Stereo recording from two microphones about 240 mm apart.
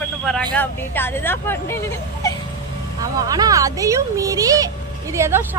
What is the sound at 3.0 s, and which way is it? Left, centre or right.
Speech, centre.